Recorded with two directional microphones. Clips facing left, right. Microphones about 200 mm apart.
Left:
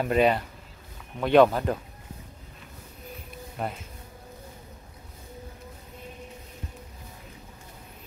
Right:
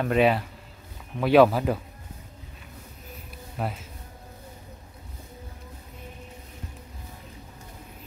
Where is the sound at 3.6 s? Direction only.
Centre (ahead or behind).